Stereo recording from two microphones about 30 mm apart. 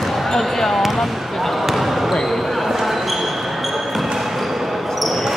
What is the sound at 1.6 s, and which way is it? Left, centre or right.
Basketball bounce, centre.